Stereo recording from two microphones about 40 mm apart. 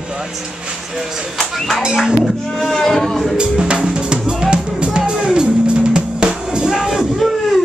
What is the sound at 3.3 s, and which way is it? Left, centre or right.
Drum, right.